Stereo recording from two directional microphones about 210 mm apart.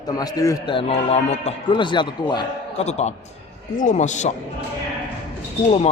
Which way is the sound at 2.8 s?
30° left (ahead or behind).